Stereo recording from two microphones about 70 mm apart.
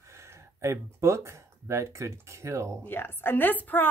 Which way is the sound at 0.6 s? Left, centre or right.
Right.